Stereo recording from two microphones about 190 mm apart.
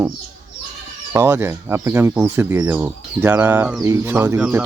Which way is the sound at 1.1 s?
15° right (ahead or behind).